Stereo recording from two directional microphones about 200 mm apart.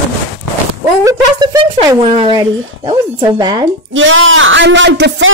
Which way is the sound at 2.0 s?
30° right (ahead or behind).